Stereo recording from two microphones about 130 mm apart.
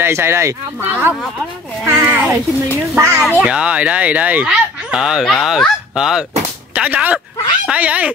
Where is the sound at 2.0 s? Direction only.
10° right (ahead or behind).